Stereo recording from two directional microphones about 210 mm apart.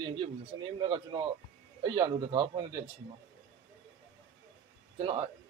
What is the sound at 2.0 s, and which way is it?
Speech, 25° right (ahead or behind).